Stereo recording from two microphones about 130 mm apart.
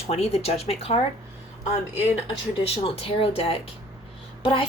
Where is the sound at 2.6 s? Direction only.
50° left (ahead or behind).